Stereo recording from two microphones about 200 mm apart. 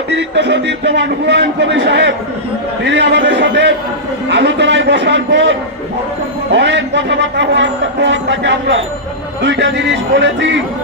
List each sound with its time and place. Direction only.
0.1 s a man's voice: 60° right (ahead or behind)